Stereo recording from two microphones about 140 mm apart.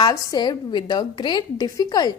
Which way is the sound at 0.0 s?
30° left (ahead or behind).